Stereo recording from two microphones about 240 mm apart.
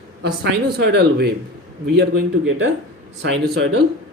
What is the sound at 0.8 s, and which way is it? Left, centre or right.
Speech, right.